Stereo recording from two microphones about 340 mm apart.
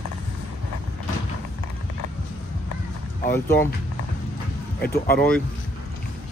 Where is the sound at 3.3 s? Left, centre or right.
Centre.